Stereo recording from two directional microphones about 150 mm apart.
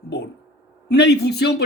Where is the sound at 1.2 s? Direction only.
90° left.